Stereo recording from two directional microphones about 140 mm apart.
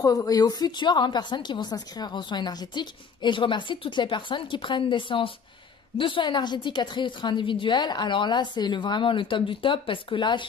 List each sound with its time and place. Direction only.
0.0 s a woman's voice: 25° left (ahead or behind)